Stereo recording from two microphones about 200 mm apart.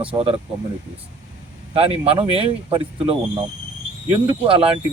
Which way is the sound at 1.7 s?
30° right (ahead or behind).